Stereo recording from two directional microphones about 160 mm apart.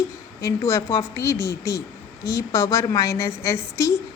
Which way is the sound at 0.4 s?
20° left (ahead or behind).